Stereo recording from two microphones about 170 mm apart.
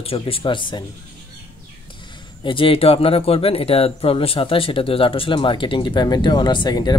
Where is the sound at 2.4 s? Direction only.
30° left (ahead or behind).